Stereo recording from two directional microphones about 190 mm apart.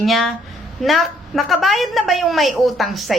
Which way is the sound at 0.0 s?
Centre (ahead or behind).